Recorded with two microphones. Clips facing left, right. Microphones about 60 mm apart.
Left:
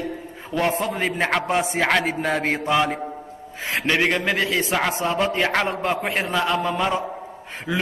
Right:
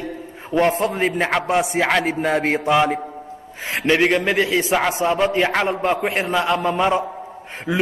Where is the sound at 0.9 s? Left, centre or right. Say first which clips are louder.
Right 2 dB; centre.